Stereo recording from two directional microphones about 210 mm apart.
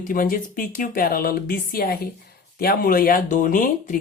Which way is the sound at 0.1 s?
40° left (ahead or behind).